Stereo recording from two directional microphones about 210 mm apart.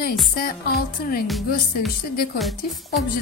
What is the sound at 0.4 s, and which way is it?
Speech, 45° left (ahead or behind).